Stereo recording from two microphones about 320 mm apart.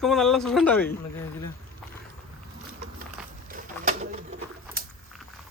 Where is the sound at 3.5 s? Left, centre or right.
Right.